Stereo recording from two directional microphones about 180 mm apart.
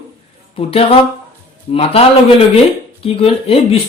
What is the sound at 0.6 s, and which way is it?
Speech, 30° left (ahead or behind).